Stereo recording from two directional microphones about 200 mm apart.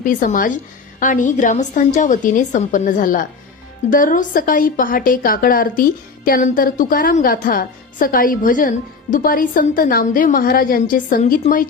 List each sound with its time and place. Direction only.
0.0 s a woman's voice: 40° left (ahead or behind)